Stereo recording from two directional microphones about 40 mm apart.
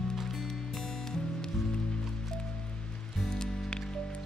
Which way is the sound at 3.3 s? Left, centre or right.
Centre.